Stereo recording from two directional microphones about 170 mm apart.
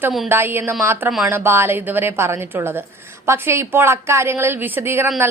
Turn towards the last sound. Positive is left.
turn(degrees=-15)  # may be behind; listen again after turning